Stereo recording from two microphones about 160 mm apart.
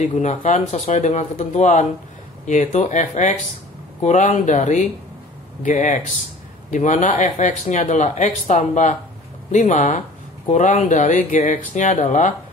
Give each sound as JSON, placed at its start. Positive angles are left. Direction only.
{"t": 0.0, "sound": "speech", "side_deg": 50}